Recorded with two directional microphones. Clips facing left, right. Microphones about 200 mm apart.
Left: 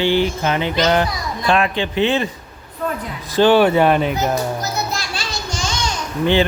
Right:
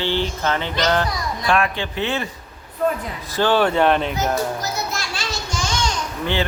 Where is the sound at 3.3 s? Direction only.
15° left (ahead or behind).